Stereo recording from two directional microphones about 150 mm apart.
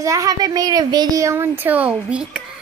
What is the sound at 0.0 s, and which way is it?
Speech, 20° right (ahead or behind).